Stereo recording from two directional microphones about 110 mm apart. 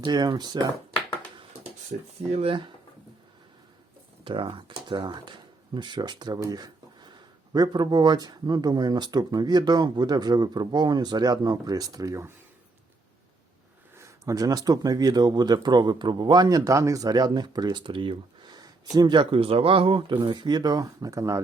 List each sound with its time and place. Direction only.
0.0 s speech: 40° right (ahead or behind)
1.9 s speech: 75° right (ahead or behind)
4.2 s speech: 50° right (ahead or behind); by 12.3 s 30° right (ahead or behind)
13.9 s speech: 30° right (ahead or behind)